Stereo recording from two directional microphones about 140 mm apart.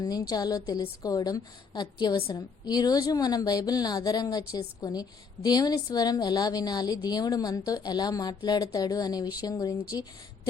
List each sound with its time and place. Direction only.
0.0 s a woman's voice: 30° left (ahead or behind)